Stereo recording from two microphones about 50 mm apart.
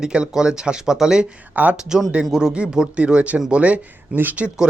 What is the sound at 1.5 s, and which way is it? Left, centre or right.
Speech, right.